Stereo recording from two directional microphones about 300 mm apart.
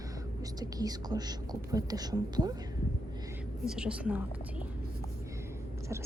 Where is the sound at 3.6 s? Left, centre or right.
Centre.